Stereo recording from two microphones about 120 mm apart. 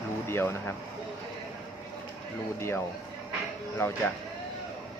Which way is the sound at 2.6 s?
20° left (ahead or behind).